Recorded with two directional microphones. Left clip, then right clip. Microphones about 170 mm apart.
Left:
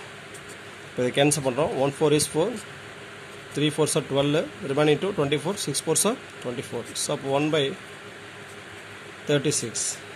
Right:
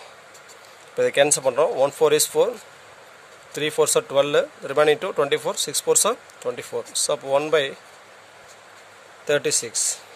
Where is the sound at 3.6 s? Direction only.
70° right (ahead or behind).